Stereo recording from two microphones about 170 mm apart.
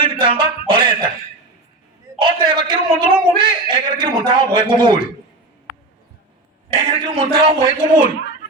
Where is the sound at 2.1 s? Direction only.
25° right (ahead or behind).